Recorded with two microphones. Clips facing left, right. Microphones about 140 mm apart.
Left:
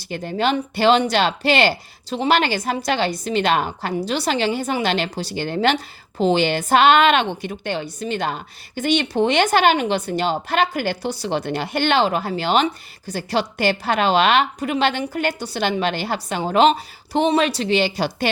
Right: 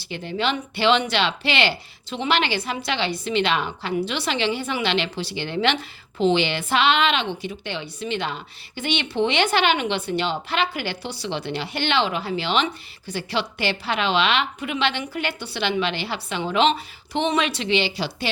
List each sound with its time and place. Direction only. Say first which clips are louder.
0.0 s speech: left 4 dB; 45° left (ahead or behind)